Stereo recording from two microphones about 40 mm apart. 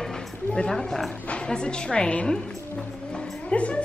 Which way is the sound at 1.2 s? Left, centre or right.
Left.